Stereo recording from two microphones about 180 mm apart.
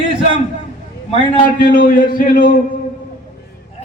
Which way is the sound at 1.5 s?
55° left (ahead or behind).